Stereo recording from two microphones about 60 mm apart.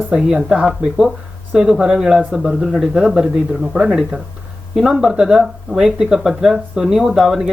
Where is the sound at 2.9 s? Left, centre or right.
Centre.